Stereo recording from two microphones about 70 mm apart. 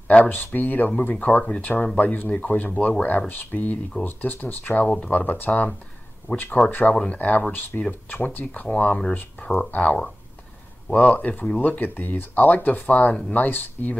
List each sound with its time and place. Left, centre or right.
0.1 s speech: left
4.8 s speech: centre